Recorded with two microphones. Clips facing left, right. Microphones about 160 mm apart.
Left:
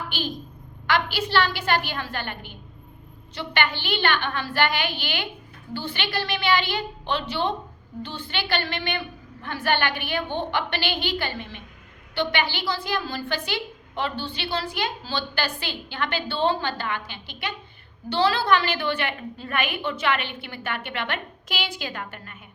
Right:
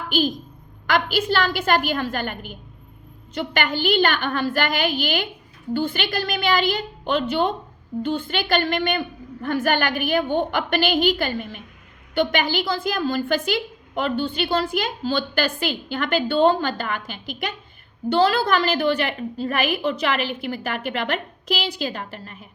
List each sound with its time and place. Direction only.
0.1 s a woman's voice: 45° right (ahead or behind)